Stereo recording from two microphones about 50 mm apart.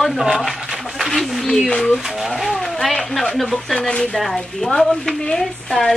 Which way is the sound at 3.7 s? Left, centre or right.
Centre.